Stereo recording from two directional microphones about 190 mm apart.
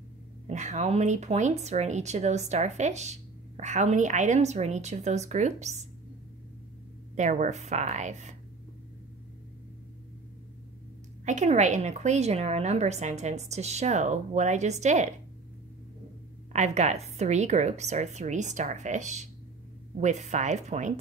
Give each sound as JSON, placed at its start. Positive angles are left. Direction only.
{"t": 0.5, "sound": "speech", "side_deg": -40}
{"t": 7.2, "sound": "speech", "side_deg": -40}
{"t": 11.2, "sound": "speech", "side_deg": -35}
{"t": 16.5, "sound": "speech", "side_deg": -35}